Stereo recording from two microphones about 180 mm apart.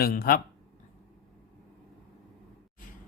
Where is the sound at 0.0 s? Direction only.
55° left (ahead or behind).